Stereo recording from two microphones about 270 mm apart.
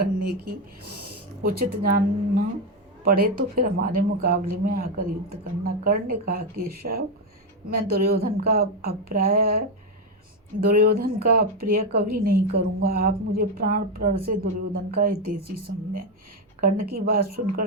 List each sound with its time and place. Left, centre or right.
0.0 s a woman's voice: right
7.8 s a woman's voice: right